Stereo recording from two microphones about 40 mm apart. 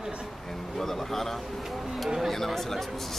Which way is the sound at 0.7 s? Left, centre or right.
Centre.